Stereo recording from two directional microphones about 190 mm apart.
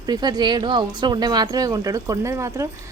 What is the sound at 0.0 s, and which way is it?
A woman's voice, 20° right (ahead or behind).